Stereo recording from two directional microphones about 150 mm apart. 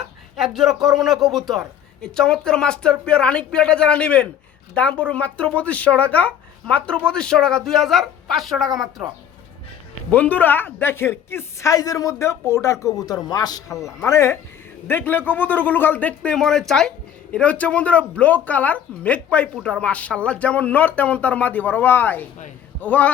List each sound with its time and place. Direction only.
0.3 s speech: centre (ahead or behind)
10.1 s speech: 10° left (ahead or behind)